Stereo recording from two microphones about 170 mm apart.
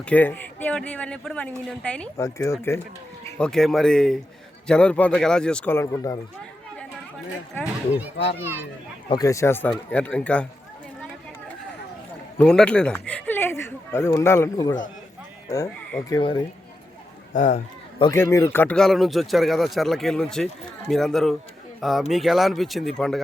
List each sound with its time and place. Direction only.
0.0 s speech: 10° left (ahead or behind)
2.1 s speech: 15° left (ahead or behind)
3.3 s speech: 5° left (ahead or behind); by 6.1 s 20° left (ahead or behind)
7.6 s speech: 10° right (ahead or behind)
9.0 s speech: 20° left (ahead or behind)
12.4 s speech: 5° left (ahead or behind); by 16.4 s 25° left (ahead or behind)
17.3 s speech: 45° left (ahead or behind)
18.1 s speech: 15° left (ahead or behind)